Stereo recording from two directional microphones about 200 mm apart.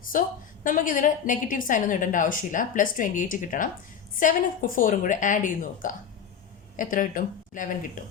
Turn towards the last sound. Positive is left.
turn(degrees=40)  # may be behind; listen again after turning